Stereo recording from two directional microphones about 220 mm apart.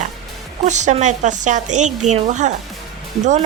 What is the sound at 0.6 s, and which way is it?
Speech, 35° right (ahead or behind).